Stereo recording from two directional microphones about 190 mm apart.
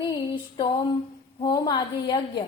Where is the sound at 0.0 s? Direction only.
20° left (ahead or behind).